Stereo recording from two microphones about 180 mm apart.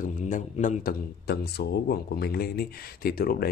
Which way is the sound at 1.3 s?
65° left (ahead or behind).